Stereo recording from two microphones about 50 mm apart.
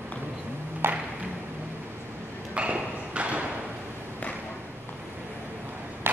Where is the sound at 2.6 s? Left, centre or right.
Right.